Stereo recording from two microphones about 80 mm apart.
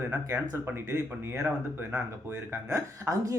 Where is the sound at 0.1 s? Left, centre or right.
Right.